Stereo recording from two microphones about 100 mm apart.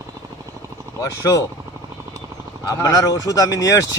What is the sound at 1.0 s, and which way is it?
Speech, 30° left (ahead or behind).